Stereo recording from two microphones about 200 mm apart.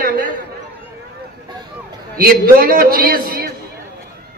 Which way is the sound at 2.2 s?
45° right (ahead or behind).